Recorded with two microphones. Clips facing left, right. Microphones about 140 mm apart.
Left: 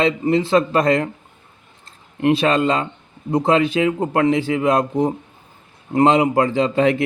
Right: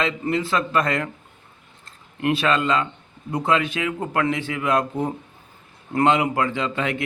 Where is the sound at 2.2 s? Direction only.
30° left (ahead or behind).